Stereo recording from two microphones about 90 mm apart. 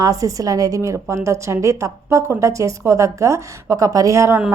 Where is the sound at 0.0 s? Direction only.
40° right (ahead or behind).